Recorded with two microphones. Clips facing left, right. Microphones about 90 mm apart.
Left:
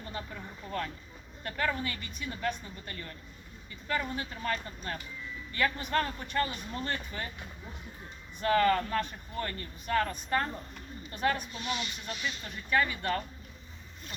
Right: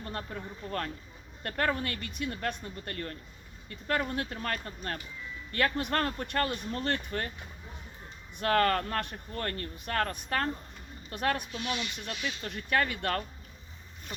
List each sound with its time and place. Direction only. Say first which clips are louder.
0.0 s a woman's voice: right 2 dB; 55° right (ahead or behind)
8.4 s a woman's voice: left 1 dB; 60° right (ahead or behind)